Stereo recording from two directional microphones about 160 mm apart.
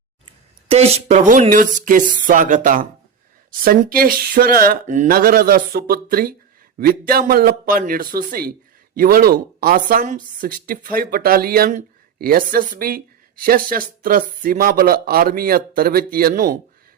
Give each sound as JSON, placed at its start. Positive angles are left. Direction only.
{"t": 0.3, "sound": "speech", "side_deg": -40}